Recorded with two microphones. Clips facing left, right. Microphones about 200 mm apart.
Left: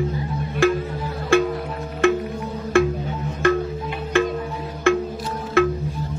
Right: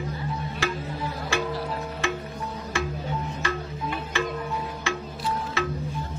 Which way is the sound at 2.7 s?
55° left (ahead or behind).